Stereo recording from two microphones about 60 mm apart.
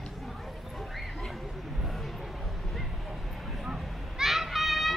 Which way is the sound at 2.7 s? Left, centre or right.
Centre.